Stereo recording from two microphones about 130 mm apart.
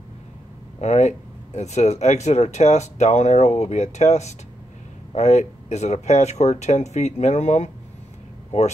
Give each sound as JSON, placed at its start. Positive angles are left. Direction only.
{"t": 0.7, "sound": "speech", "side_deg": 60}